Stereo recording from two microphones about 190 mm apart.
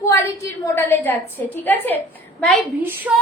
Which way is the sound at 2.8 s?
10° right (ahead or behind).